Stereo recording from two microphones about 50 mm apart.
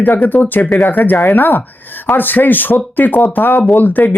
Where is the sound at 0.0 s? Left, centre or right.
Left.